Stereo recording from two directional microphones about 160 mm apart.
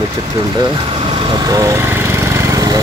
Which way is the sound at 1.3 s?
25° right (ahead or behind).